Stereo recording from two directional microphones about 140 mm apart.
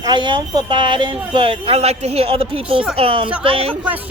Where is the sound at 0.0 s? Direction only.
30° right (ahead or behind).